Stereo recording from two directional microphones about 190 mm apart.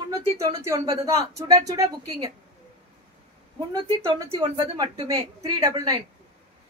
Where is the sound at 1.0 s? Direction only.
20° right (ahead or behind).